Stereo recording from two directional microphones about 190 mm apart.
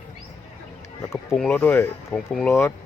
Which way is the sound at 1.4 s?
10° left (ahead or behind).